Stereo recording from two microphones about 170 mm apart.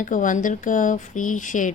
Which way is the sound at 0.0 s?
50° left (ahead or behind).